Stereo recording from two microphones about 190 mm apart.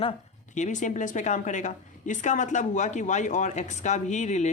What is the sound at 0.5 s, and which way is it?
A woman's voice, 40° left (ahead or behind).